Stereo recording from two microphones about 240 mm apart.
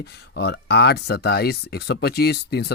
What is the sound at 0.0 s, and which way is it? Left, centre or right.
Speech, left.